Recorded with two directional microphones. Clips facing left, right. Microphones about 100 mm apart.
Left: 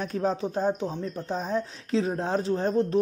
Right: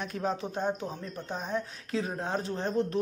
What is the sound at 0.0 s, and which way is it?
Speech, 35° left (ahead or behind).